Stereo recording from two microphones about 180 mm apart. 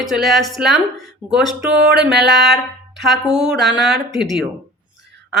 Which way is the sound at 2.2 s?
70° right (ahead or behind).